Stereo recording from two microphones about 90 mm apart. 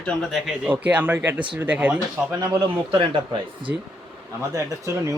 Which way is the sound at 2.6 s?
80° right.